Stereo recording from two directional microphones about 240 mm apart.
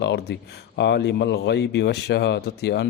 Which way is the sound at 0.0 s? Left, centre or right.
Left.